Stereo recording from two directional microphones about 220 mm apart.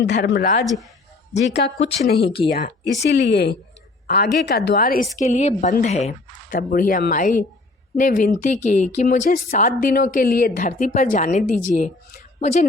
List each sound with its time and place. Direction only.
0.0 s speech: 50° left (ahead or behind)
0.6 s speech: centre (ahead or behind)
1.4 s a woman's voice: 50° left (ahead or behind); by 12.6 s 30° left (ahead or behind)